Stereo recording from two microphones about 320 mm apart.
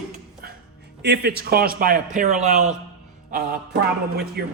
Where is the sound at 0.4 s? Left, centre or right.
Right.